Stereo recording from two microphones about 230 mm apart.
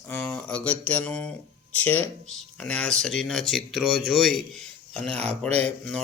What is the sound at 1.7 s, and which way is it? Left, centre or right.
Speech, centre.